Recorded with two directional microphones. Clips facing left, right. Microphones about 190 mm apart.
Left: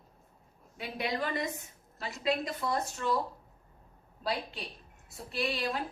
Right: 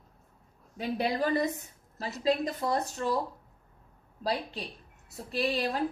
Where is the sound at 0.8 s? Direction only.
35° right (ahead or behind).